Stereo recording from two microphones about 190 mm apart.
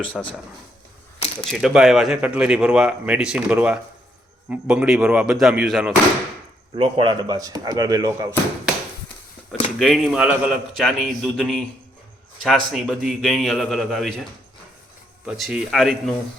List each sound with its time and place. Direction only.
0.1 s speech: 5° left (ahead or behind)
1.5 s speech: centre (ahead or behind)
6.7 s speech: 25° right (ahead or behind)
9.7 s speech: centre (ahead or behind)
15.3 s speech: 5° right (ahead or behind)